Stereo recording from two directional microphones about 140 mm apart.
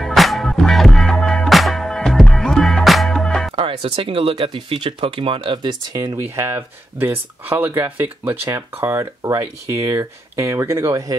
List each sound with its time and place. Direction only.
0.0 s music: centre (ahead or behind)
3.5 s speech: 45° right (ahead or behind)
6.3 s speech: 15° right (ahead or behind)